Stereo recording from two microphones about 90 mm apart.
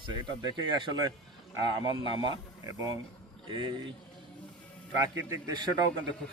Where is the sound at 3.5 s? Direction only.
55° right (ahead or behind).